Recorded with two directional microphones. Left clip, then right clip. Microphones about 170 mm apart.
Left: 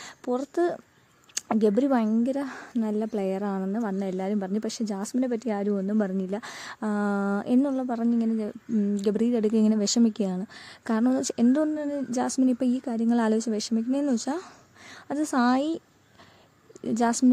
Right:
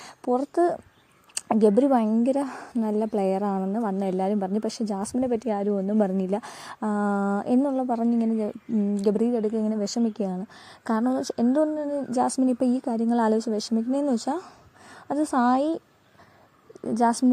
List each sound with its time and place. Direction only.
0.0 s a sound: centre (ahead or behind)
0.5 s speech: centre (ahead or behind)
6.0 s speech: 10° right (ahead or behind)
6.4 s speech: centre (ahead or behind)
9.4 s speech: 15° left (ahead or behind); by 15.8 s centre (ahead or behind)
17.1 s speech: centre (ahead or behind)